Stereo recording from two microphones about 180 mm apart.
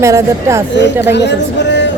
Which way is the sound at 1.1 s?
75° left (ahead or behind).